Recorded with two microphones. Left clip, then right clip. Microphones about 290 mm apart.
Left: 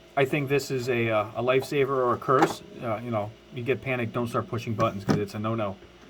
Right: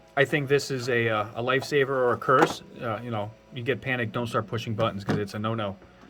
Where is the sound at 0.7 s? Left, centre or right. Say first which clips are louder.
Right 1 dB; centre.